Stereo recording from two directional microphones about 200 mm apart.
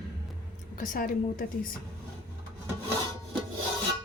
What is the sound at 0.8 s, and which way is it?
Speech, 45° left (ahead or behind).